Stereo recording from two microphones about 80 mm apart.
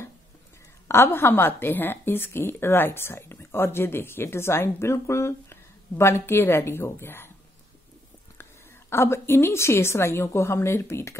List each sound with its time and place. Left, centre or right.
0.8 s a woman's voice: left
8.9 s a woman's voice: left